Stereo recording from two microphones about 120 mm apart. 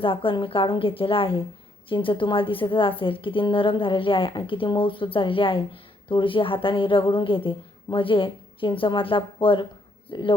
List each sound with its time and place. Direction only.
0.0 s a woman's voice: 45° left (ahead or behind)